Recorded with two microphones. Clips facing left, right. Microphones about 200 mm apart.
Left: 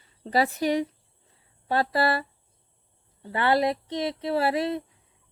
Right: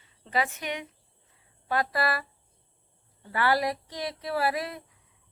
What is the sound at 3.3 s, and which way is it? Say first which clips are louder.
Speech: left 3 dB; 25° left (ahead or behind).